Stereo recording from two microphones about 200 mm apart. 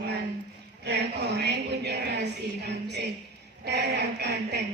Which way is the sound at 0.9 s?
55° right (ahead or behind).